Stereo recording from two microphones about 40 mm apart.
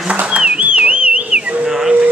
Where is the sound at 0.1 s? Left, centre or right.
Right.